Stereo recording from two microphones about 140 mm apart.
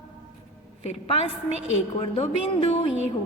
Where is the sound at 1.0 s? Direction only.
45° left (ahead or behind).